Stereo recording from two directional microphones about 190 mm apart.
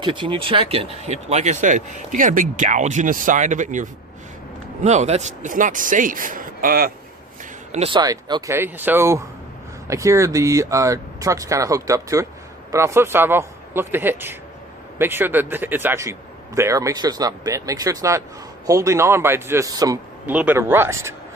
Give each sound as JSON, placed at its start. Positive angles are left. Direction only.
{"t": 0.0, "sound": "speech", "side_deg": -25}
{"t": 7.7, "sound": "speech", "side_deg": -30}
{"t": 20.2, "sound": "speech", "side_deg": -10}